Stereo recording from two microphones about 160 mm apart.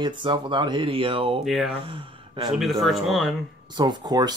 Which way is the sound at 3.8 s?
25° right (ahead or behind).